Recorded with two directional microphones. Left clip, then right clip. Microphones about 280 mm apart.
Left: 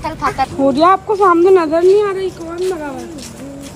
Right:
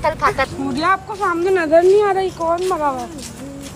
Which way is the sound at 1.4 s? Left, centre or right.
Centre.